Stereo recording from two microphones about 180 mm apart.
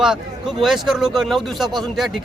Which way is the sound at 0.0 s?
Centre (ahead or behind).